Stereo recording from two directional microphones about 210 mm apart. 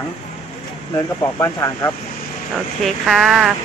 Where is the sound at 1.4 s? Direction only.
15° left (ahead or behind).